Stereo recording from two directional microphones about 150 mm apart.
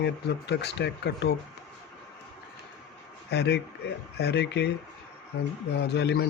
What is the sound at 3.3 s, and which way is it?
Speech, 90° left.